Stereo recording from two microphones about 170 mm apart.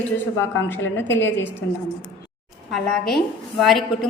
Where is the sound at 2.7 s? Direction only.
Centre (ahead or behind).